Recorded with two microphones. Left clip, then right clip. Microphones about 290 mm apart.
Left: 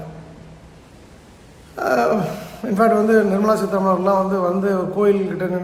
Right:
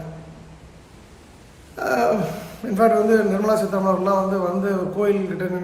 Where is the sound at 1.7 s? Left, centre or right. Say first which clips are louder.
Left 2 dB; centre.